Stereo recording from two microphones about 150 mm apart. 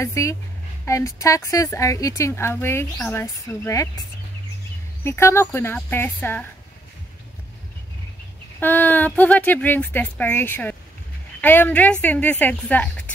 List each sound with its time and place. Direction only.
0.0 s speech: 20° left (ahead or behind)
5.0 s speech: 15° left (ahead or behind)
8.5 s speech: 10° left (ahead or behind)